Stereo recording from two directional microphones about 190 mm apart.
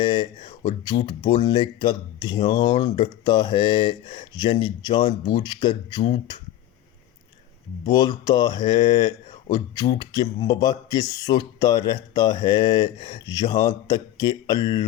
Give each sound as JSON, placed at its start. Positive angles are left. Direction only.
{"t": 0.0, "sound": "speech", "side_deg": 25}
{"t": 7.9, "sound": "speech", "side_deg": 20}